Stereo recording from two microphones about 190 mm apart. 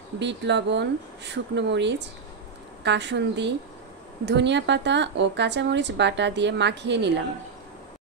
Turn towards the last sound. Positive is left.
turn(degrees=-65)  # may be behind; listen again after turning